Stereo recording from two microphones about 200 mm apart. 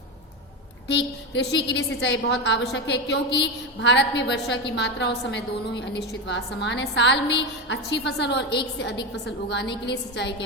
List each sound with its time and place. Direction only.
0.9 s a woman's voice: 60° left (ahead or behind)